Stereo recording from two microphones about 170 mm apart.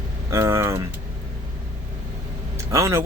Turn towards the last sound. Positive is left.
turn(degrees=-15)  # may be behind; listen again after turning